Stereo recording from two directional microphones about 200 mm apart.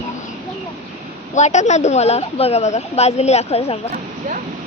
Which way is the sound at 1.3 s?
35° left (ahead or behind).